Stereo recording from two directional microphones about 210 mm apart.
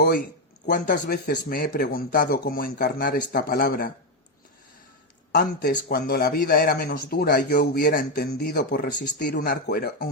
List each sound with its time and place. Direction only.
0.6 s speech: 40° left (ahead or behind)
5.3 s speech: 45° left (ahead or behind)